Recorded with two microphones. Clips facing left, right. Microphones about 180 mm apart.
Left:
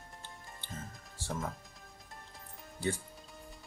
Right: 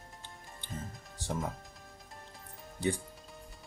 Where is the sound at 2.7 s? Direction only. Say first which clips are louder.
Right 3 dB; 15° right (ahead or behind).